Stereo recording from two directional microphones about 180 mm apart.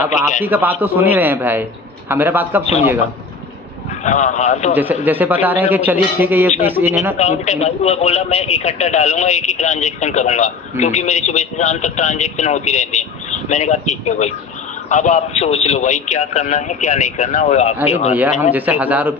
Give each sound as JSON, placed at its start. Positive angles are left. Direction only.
{"t": 0.4, "sound": "a man's voice", "side_deg": -10}
{"t": 4.0, "sound": "a man's voice", "side_deg": 40}
{"t": 4.7, "sound": "a man's voice", "side_deg": -10}
{"t": 7.2, "sound": "a man's voice", "side_deg": 40}
{"t": 18.1, "sound": "a man's voice", "side_deg": -10}